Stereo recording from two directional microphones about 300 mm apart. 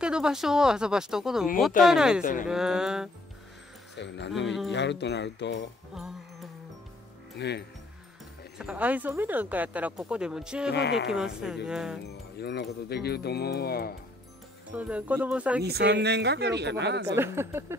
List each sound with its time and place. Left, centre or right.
0.0 s speech: centre
3.9 s speech: left
5.9 s music: centre
7.3 s speech: left
8.5 s speech: centre
10.7 s speech: left
11.1 s speech: centre
12.1 s speech: left
14.7 s speech: centre
15.6 s speech: right
17.1 s speech: centre